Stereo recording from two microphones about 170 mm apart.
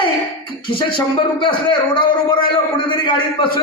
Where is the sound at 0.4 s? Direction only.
30° left (ahead or behind).